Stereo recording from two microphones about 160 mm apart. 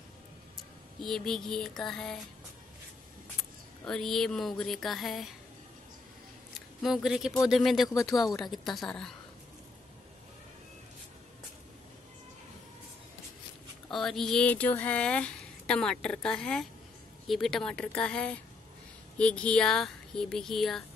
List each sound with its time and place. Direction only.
1.0 s speech: 5° left (ahead or behind)
3.8 s speech: 5° left (ahead or behind)
6.8 s speech: centre (ahead or behind)
7.9 s speech: 20° left (ahead or behind)
8.4 s speech: centre (ahead or behind)
13.8 s speech: centre (ahead or behind)